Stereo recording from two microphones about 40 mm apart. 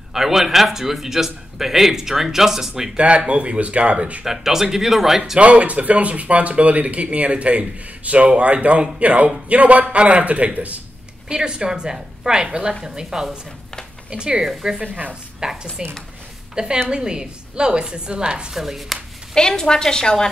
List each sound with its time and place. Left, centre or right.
0.1 s a man's voice: centre
3.3 s speech: right
4.2 s a man's voice: centre
5.4 s speech: right
11.2 s a woman's voice: centre
18.5 s speech: centre
19.3 s a woman's voice: centre